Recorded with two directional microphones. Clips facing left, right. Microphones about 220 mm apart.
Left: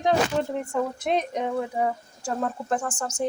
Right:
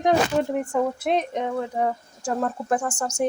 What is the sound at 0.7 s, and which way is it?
A woman's voice, 5° right (ahead or behind).